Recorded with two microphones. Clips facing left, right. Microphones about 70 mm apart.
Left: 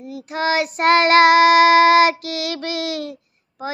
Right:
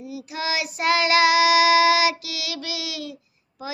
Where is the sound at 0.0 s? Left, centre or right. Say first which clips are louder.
Left 7 dB; left.